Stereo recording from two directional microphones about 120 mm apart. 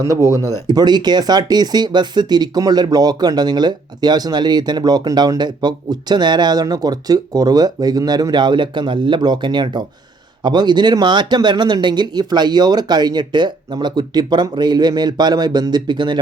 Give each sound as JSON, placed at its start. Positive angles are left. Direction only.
{"t": 0.0, "sound": "speech", "side_deg": -25}